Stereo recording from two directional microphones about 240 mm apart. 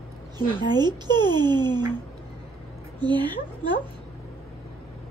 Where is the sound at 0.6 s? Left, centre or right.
Centre.